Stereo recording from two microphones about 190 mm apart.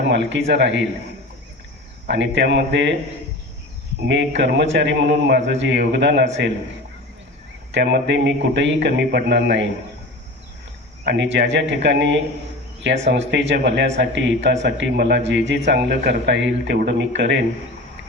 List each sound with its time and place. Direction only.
0.1 s a man's voice: 70° right (ahead or behind)
2.0 s a man's voice: 70° right (ahead or behind)
4.0 s a man's voice: 70° right (ahead or behind)
7.7 s a man's voice: 65° right (ahead or behind)
11.0 s a man's voice: 65° right (ahead or behind)